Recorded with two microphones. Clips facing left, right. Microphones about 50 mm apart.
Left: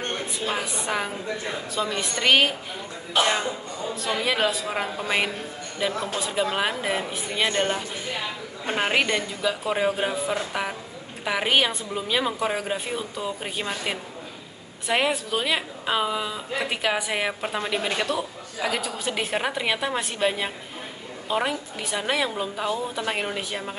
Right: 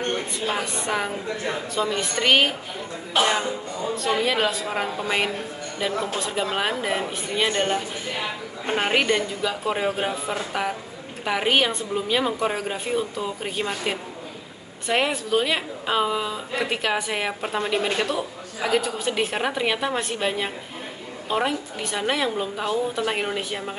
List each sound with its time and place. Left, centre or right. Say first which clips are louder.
0.5 s a woman's voice: right 1 dB; centre
4.2 s a woman's voice: right 1 dB; centre